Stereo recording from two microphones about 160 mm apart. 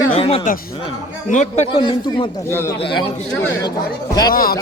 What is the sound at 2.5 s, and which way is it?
Speech, 15° left (ahead or behind).